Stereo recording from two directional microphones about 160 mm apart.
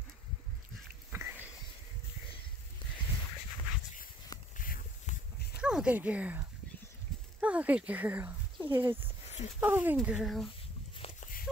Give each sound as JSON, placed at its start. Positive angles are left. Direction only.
{"t": 1.1, "sound": "a sound", "side_deg": -15}
{"t": 4.6, "sound": "dog", "side_deg": 60}
{"t": 5.6, "sound": "speech", "side_deg": -5}